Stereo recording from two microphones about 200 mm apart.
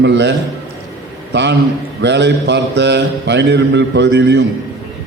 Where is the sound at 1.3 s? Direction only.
60° right (ahead or behind).